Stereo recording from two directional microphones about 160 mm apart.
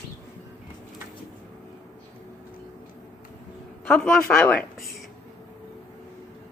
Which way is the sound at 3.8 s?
5° left (ahead or behind).